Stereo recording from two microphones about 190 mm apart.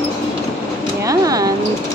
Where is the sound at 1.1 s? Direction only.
20° right (ahead or behind).